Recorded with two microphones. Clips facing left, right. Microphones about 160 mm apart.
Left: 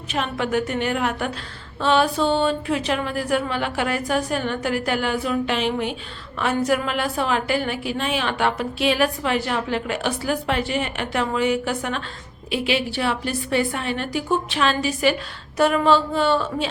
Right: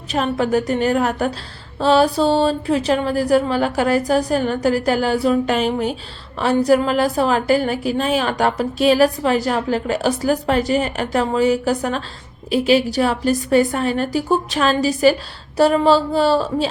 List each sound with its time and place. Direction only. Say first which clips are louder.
0.1 s a woman's voice: right 5 dB; 40° right (ahead or behind)